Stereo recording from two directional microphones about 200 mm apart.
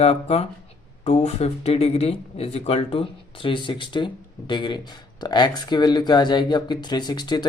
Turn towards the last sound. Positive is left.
turn(degrees=20)  # may be behind; listen again after turning